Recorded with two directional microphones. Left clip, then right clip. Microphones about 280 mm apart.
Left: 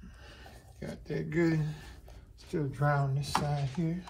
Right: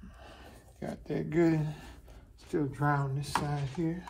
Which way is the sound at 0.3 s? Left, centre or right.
Centre.